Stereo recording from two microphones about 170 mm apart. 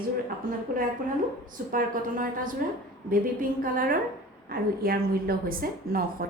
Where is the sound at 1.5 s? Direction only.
55° right (ahead or behind).